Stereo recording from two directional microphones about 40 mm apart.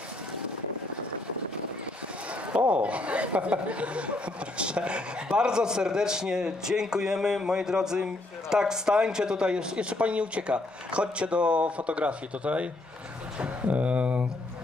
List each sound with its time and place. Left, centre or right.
2.5 s a man's voice: right
13.7 s speech: right